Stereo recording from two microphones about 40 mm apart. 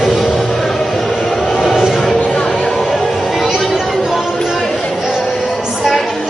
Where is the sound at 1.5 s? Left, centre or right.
Centre.